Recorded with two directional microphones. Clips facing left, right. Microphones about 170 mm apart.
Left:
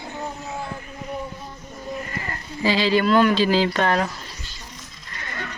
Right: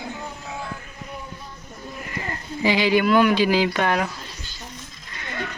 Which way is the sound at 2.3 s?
20° right (ahead or behind).